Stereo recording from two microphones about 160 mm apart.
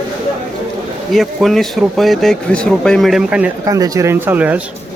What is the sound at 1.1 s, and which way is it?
Speech, centre (ahead or behind).